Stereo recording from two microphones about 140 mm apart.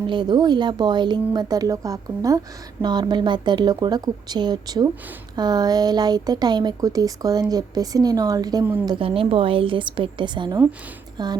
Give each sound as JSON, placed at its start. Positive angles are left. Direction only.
{"t": 0.1, "sound": "speech", "side_deg": -30}
{"t": 8.9, "sound": "speech", "side_deg": -40}